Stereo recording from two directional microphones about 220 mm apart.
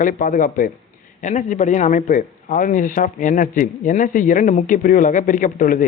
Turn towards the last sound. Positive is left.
turn(degrees=40)  # may be behind; listen again after turning